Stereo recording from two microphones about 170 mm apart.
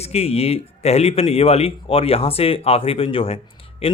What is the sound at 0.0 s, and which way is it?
Speech, 35° left (ahead or behind).